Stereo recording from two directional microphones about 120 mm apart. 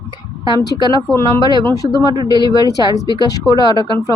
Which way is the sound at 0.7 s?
35° left (ahead or behind).